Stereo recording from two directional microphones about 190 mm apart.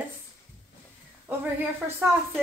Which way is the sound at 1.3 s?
10° right (ahead or behind).